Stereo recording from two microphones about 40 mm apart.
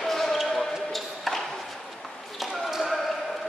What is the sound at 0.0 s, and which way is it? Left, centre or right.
Basketball bounce, centre.